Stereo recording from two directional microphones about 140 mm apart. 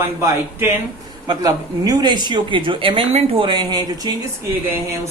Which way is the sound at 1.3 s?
30° right (ahead or behind).